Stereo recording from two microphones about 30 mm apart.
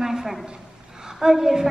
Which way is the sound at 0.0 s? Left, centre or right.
Centre.